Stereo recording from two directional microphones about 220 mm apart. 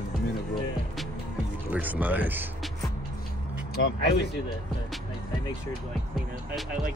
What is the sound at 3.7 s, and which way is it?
Speech, 45° left (ahead or behind).